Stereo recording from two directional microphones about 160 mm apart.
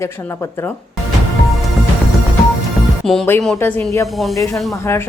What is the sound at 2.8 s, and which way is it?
Music, centre (ahead or behind).